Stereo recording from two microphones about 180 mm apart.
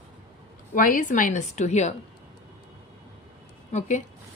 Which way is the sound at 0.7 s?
50° left (ahead or behind).